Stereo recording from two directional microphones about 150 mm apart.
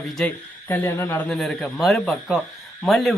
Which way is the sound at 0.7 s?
15° left (ahead or behind).